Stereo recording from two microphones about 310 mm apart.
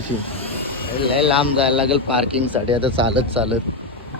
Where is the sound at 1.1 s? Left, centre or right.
Centre.